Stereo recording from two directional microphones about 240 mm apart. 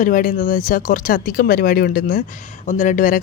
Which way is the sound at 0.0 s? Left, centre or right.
Left.